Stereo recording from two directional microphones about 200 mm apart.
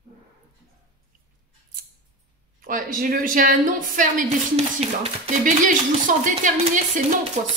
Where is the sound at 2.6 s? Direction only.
45° right (ahead or behind).